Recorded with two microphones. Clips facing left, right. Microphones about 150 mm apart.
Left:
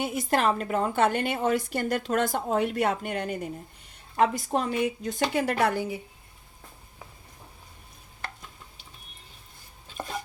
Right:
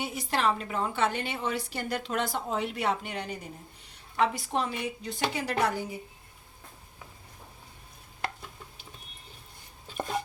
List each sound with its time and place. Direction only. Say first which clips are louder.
0.0 s a woman's voice: left 4 dB; 50° left (ahead or behind)